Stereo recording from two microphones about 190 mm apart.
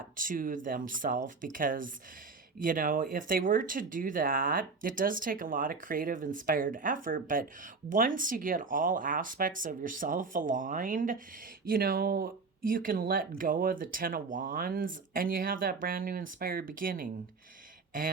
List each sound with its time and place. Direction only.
0.2 s speech: 45° right (ahead or behind)